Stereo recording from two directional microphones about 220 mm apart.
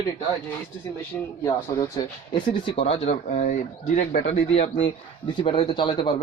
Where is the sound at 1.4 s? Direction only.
15° left (ahead or behind).